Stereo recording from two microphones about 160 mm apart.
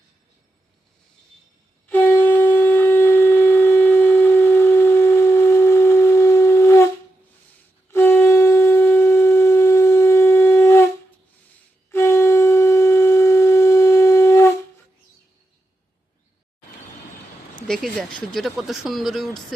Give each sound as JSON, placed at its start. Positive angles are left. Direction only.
{"t": 1.9, "sound": "shofar", "side_deg": 10}
{"t": 7.9, "sound": "shofar", "side_deg": 15}
{"t": 11.9, "sound": "wind instrument", "side_deg": 15}
{"t": 17.7, "sound": "speech", "side_deg": 5}